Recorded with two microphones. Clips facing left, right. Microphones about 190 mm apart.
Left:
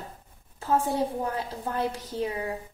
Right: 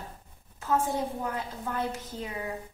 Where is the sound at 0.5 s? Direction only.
35° left (ahead or behind).